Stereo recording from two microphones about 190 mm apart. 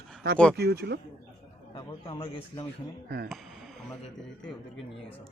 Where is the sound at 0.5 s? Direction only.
55° right (ahead or behind).